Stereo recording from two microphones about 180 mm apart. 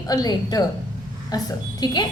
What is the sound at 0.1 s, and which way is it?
Speech, 20° left (ahead or behind).